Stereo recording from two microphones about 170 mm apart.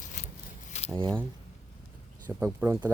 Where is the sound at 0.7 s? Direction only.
40° left (ahead or behind).